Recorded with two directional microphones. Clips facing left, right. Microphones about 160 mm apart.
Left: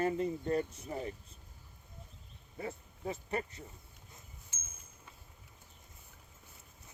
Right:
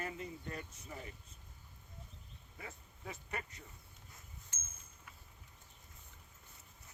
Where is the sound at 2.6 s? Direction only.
30° left (ahead or behind).